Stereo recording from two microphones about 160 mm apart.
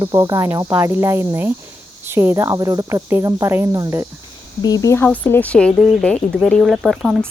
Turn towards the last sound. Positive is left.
turn(degrees=0)  # may be behind; listen again after turning